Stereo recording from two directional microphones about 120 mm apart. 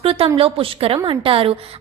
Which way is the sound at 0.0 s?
50° right (ahead or behind).